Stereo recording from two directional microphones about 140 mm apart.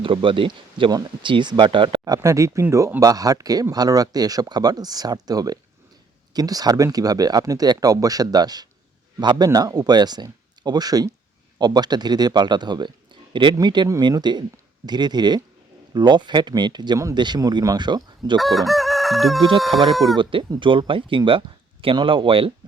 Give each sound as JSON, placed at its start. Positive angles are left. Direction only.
{"t": 0.0, "sound": "speech", "side_deg": -40}
{"t": 2.1, "sound": "speech", "side_deg": -20}
{"t": 18.3, "sound": "chicken", "side_deg": 0}
{"t": 19.5, "sound": "speech", "side_deg": 0}
{"t": 20.1, "sound": "speech", "side_deg": -35}